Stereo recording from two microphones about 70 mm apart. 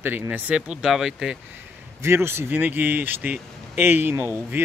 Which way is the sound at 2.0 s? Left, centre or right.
Right.